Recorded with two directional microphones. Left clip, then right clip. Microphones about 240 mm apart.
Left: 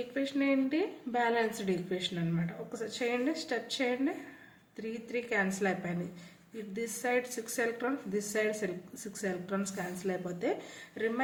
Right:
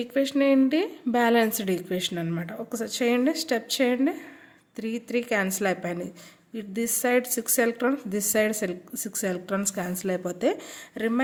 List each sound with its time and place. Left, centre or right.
0.1 s a woman's voice: right